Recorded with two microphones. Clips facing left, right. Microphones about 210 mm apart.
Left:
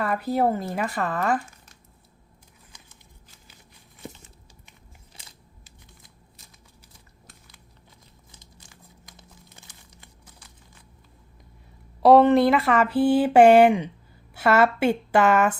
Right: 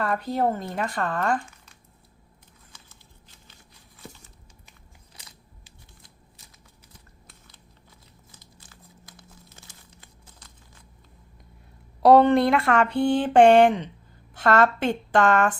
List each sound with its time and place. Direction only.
0.0 s speech: 5° left (ahead or behind)
8.7 s crumpling: 20° left (ahead or behind)
12.0 s speech: centre (ahead or behind)